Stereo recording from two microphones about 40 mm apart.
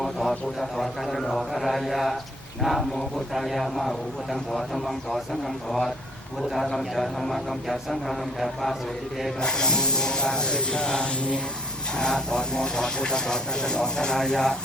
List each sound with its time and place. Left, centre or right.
0.2 s a man's voice: centre
9.4 s speech: centre